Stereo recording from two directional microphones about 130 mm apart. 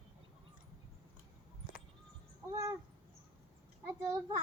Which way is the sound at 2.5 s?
25° right (ahead or behind).